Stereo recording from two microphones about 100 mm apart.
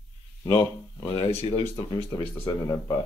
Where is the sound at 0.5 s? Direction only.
55° left (ahead or behind).